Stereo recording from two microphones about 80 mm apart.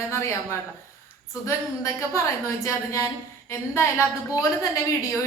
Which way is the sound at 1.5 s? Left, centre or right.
Left.